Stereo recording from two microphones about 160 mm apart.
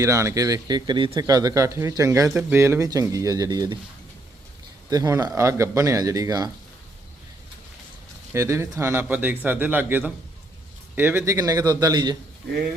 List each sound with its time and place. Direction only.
0.0 s speech: 20° right (ahead or behind)
4.9 s speech: 20° right (ahead or behind)
8.3 s speech: 15° right (ahead or behind)